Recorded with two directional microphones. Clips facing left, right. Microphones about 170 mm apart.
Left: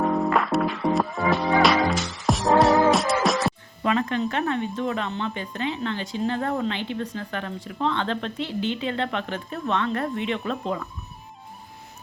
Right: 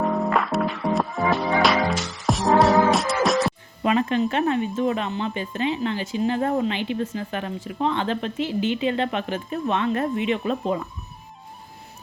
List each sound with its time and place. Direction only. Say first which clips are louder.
0.3 s music: even; centre (ahead or behind)
3.8 s speech: right 3 dB; 20° right (ahead or behind)